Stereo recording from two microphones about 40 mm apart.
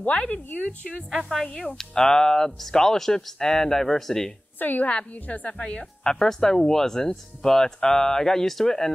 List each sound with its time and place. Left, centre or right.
0.1 s a woman's voice: left
1.1 s a woman's voice: centre
4.6 s a woman's voice: left
4.8 s a woman's voice: left
6.0 s speech: centre